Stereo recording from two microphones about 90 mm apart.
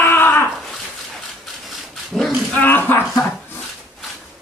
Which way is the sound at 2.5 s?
20° left (ahead or behind).